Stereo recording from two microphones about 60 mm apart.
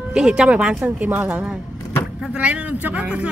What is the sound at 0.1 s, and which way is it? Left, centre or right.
A woman's voice, centre.